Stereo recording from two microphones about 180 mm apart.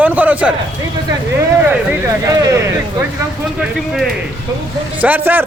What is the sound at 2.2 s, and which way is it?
Speech, 20° right (ahead or behind).